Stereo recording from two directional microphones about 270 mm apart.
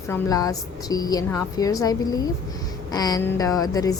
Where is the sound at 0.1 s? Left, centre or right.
Centre.